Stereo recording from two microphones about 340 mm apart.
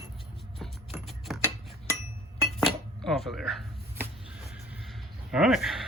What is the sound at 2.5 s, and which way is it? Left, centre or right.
Cutlery, centre.